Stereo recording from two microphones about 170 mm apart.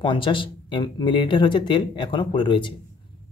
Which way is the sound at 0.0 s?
30° left (ahead or behind).